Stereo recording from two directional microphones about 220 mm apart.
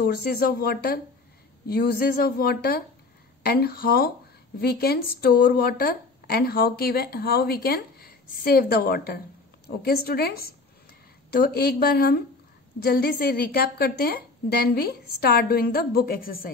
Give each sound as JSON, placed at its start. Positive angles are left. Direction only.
{"t": 0.0, "sound": "a woman's voice", "side_deg": 45}